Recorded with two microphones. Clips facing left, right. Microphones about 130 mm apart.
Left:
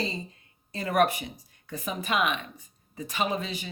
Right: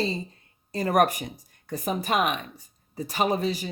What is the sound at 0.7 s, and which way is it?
Speech, 40° right (ahead or behind).